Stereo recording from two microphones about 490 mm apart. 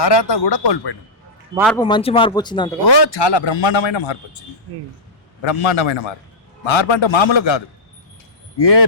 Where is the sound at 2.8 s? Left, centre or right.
Left.